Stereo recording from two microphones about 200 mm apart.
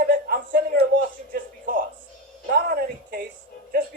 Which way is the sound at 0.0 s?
45° right (ahead or behind).